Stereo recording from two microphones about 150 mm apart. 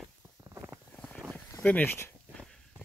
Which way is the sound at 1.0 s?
Centre (ahead or behind).